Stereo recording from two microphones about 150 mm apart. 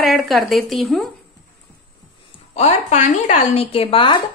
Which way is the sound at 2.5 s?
45° left (ahead or behind).